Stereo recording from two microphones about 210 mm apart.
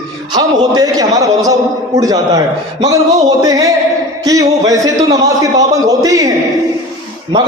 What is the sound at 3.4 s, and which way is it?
A man's voice, 15° right (ahead or behind).